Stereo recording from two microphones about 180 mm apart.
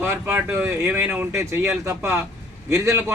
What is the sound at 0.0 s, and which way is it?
A man's voice, 10° right (ahead or behind).